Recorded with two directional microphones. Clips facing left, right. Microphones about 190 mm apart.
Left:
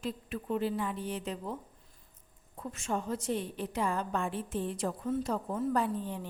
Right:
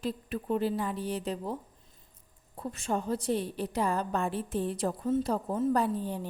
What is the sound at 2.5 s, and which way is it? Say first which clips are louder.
A woman's voice: right 3 dB; 35° right (ahead or behind).